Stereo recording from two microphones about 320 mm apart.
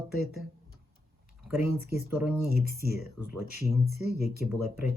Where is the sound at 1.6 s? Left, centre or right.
Centre.